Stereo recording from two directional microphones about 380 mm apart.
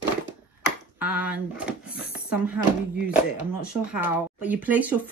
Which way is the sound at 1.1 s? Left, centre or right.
Centre.